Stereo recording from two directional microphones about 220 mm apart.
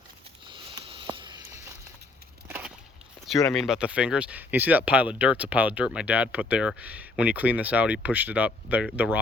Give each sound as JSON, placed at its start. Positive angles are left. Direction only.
{"t": 0.4, "sound": "sniff", "side_deg": -20}
{"t": 2.5, "sound": "a sound", "side_deg": -10}
{"t": 3.5, "sound": "speech", "side_deg": 0}